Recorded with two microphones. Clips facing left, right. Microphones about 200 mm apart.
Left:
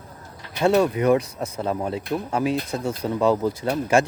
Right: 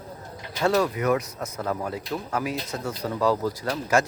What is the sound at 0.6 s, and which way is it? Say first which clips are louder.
Speech: left 4 dB; 25° left (ahead or behind).